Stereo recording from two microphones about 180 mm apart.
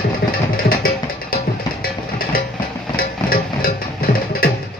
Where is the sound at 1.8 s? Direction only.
55° left (ahead or behind).